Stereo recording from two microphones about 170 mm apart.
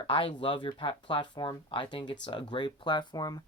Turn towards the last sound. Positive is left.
turn(degrees=25)  # may be behind; listen again after turning